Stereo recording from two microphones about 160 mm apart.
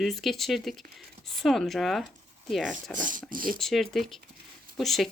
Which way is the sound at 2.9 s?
55° right (ahead or behind).